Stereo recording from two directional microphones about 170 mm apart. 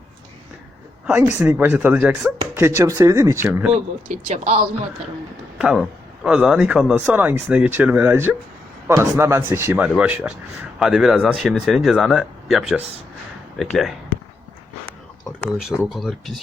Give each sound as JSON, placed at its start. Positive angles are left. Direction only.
{"t": 1.0, "sound": "speech", "side_deg": -10}
{"t": 4.1, "sound": "speech", "side_deg": -45}
{"t": 5.5, "sound": "speech", "side_deg": 0}
{"t": 15.9, "sound": "speech", "side_deg": 0}